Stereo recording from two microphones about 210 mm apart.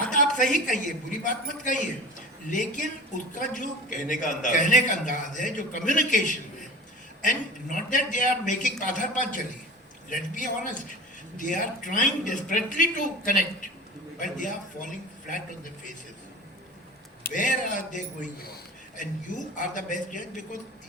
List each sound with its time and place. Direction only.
0.1 s a man's voice: 35° left (ahead or behind)
17.2 s a man's voice: 40° left (ahead or behind)